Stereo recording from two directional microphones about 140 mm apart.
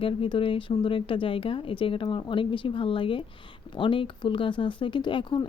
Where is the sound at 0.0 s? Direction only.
40° left (ahead or behind).